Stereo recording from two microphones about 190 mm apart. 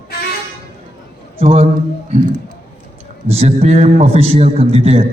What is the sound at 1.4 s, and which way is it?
Speech, 35° right (ahead or behind).